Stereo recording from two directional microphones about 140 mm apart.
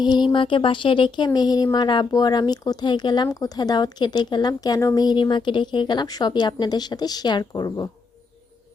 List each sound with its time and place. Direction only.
0.0 s speech: 30° left (ahead or behind)